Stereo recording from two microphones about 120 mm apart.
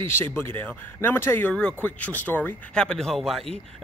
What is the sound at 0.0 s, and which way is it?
Speech, 20° left (ahead or behind).